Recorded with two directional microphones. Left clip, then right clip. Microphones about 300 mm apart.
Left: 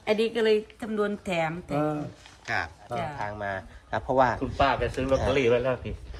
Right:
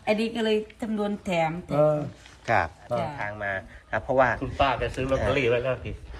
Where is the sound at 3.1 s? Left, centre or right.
Centre.